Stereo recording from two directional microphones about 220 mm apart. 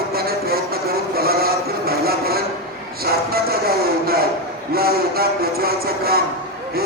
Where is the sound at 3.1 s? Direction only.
45° right (ahead or behind).